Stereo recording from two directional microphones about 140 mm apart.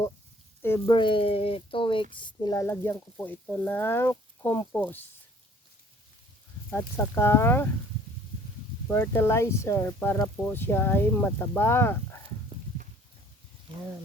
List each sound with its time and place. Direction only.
0.9 s speech: 35° left (ahead or behind); by 5.0 s 15° left (ahead or behind)
6.7 s speech: 15° left (ahead or behind)
8.9 s speech: 15° left (ahead or behind)